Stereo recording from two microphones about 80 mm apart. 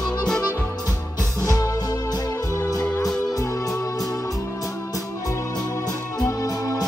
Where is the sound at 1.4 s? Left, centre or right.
Left.